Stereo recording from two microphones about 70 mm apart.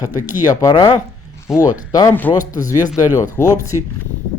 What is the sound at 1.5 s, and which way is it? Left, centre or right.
Speech, left.